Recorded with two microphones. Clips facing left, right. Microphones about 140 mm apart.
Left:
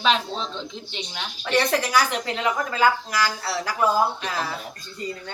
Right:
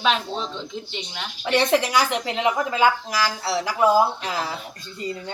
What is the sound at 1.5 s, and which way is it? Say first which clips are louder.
Speech: right 2 dB; 20° right (ahead or behind).